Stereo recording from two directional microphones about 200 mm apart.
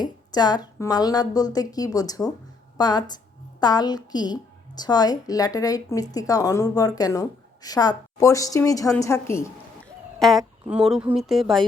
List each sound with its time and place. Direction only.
0.0 s a woman's voice: 20° left (ahead or behind)
10.2 s speech: centre (ahead or behind)